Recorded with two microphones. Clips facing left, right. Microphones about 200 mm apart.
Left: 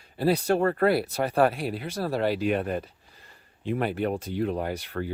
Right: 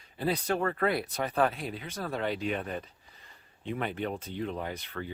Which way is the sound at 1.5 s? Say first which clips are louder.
Left 7 dB; 70° left (ahead or behind).